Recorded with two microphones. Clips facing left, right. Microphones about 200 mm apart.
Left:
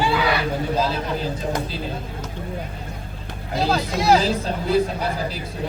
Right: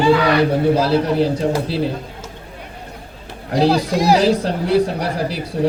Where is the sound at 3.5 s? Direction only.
75° right (ahead or behind).